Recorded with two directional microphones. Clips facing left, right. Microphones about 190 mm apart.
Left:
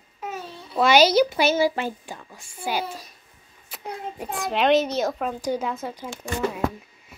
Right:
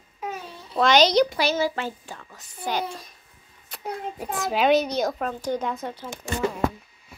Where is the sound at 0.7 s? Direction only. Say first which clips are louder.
Left 1 dB; 10° left (ahead or behind).